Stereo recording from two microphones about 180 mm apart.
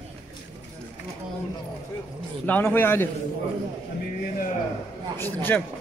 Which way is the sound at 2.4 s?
10° left (ahead or behind).